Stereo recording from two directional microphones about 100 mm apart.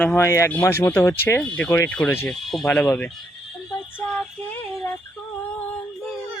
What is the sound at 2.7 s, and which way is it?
Speech, 20° left (ahead or behind).